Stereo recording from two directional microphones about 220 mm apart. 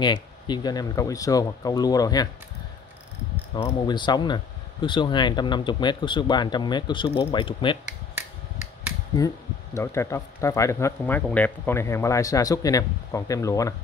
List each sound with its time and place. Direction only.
0.0 s speech: 20° left (ahead or behind)
3.6 s speech: 20° left (ahead or behind)
9.2 s speech: 15° left (ahead or behind)